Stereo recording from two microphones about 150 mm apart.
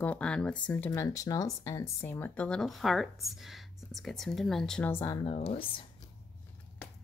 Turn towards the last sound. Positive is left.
turn(degrees=40)  # may be behind; listen again after turning